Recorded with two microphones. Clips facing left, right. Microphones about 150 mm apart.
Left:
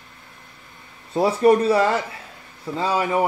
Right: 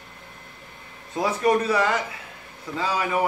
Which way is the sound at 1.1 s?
30° left (ahead or behind).